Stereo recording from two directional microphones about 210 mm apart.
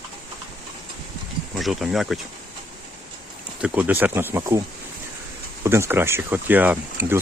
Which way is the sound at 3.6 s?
5° right (ahead or behind).